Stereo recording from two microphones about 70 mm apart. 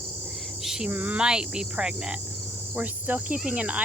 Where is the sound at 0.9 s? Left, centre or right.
Right.